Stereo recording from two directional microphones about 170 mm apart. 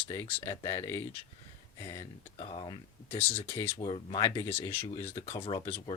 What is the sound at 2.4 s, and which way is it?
Speech, 35° left (ahead or behind).